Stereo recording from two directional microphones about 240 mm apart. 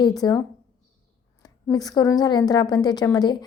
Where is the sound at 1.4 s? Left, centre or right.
Centre.